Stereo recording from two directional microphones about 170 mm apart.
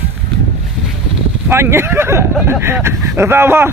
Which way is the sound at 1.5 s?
15° right (ahead or behind).